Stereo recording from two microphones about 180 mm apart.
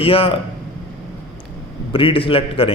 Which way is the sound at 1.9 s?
30° left (ahead or behind).